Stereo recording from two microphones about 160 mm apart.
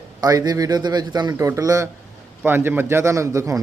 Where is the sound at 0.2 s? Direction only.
25° right (ahead or behind).